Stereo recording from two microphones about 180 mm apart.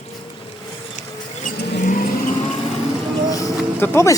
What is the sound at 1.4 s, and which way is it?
Vehicle, 45° left (ahead or behind).